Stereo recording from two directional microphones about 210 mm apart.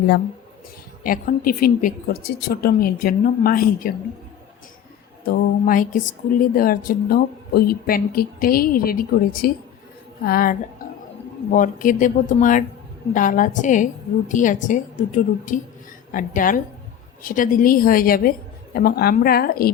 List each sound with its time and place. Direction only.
1.0 s speech: 40° left (ahead or behind)
5.2 s a woman's voice: 45° left (ahead or behind)